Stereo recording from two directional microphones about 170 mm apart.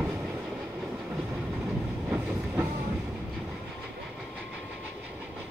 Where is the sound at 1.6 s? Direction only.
10° right (ahead or behind).